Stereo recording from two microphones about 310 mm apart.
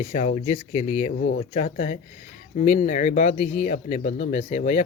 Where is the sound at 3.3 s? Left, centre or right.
Left.